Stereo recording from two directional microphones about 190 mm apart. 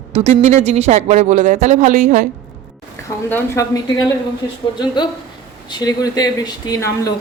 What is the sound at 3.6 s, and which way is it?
Speech, 15° left (ahead or behind).